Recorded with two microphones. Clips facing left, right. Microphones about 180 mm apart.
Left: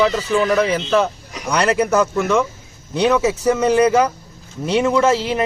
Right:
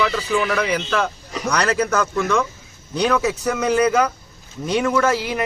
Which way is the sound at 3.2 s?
10° left (ahead or behind).